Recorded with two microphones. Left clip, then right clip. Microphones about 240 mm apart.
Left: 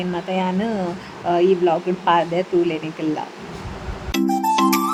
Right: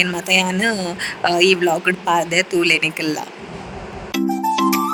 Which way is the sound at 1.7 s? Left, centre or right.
Centre.